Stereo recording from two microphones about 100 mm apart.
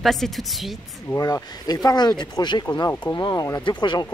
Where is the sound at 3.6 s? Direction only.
50° left (ahead or behind).